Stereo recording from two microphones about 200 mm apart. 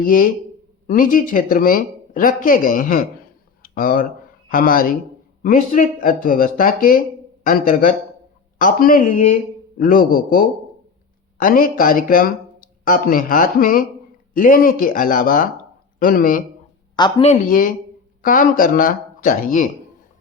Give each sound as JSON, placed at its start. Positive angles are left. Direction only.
{"t": 0.0, "sound": "speech", "side_deg": 45}
{"t": 3.6, "sound": "a sound", "side_deg": 45}
{"t": 4.4, "sound": "a man's voice", "side_deg": 45}
{"t": 16.9, "sound": "speech", "side_deg": 20}
{"t": 17.2, "sound": "speech", "side_deg": 40}